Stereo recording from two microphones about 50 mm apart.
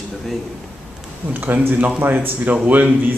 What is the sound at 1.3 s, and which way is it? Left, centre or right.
Speech, right.